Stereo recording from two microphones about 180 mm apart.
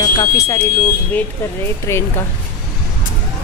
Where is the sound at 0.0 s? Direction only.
20° left (ahead or behind).